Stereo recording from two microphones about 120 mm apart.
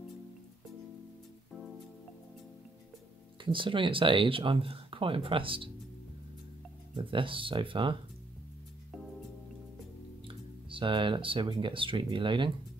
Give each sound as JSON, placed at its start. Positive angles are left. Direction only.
{"t": 3.5, "sound": "speech", "side_deg": -45}
{"t": 7.0, "sound": "speech", "side_deg": -45}
{"t": 10.2, "sound": "speech", "side_deg": -45}